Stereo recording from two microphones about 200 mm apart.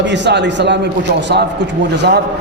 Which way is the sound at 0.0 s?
60° right (ahead or behind).